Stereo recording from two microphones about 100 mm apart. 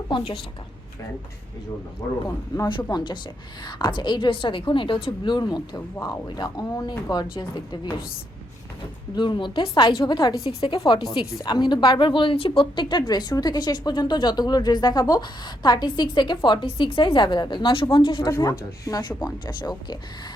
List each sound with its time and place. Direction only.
0.1 s a woman's voice: 55° left (ahead or behind)
2.0 s speech: 30° left (ahead or behind)
2.5 s speech: 45° left (ahead or behind)
7.3 s speech: 55° left (ahead or behind)
9.1 s speech: 50° left (ahead or behind)
10.4 s speech: 65° left (ahead or behind)
10.8 s speech: 50° left (ahead or behind)
18.3 s speech: 30° left (ahead or behind); by 20.3 s 45° left (ahead or behind)